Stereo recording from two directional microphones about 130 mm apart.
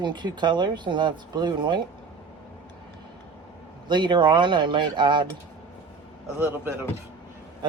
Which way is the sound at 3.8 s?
35° right (ahead or behind).